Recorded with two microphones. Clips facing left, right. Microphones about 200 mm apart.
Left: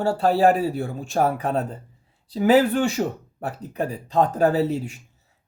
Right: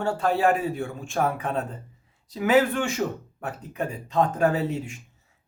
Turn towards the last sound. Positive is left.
turn(degrees=35)  # may be behind; listen again after turning